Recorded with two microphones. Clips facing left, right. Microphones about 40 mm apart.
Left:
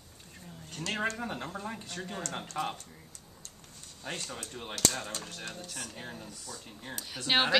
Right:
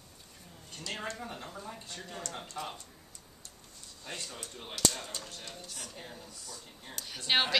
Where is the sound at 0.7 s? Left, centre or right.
Left.